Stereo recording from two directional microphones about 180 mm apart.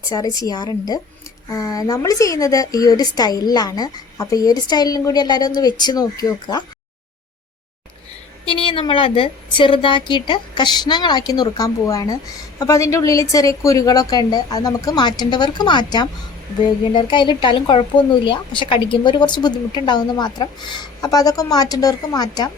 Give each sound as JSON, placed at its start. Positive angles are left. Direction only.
{"t": 0.1, "sound": "a woman's voice", "side_deg": 20}
{"t": 8.4, "sound": "a woman's voice", "side_deg": 30}